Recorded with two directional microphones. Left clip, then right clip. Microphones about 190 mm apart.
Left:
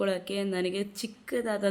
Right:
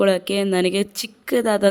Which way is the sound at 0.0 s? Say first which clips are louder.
Right 11 dB; 55° right (ahead or behind).